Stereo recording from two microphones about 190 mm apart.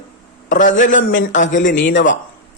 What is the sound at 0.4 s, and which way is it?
A man's voice, 45° left (ahead or behind).